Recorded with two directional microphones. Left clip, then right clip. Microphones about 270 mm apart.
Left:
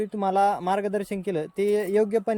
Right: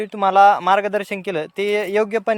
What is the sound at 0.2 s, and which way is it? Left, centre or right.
Speech, centre.